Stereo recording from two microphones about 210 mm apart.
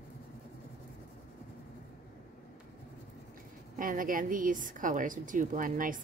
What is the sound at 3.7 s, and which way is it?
A woman's voice, 40° right (ahead or behind).